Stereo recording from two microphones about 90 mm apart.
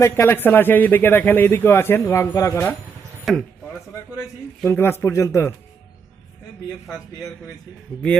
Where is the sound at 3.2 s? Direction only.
Centre (ahead or behind).